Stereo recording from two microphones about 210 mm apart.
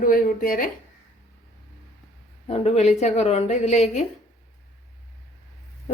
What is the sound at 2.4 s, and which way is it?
A woman's voice, 30° left (ahead or behind).